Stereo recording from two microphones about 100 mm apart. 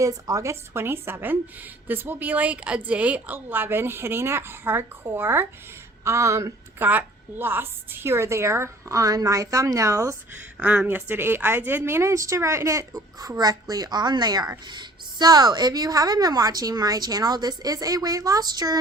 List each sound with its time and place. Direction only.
0.0 s a woman's voice: 35° right (ahead or behind)
10.6 s a woman's voice: 15° right (ahead or behind); by 18.8 s 40° right (ahead or behind)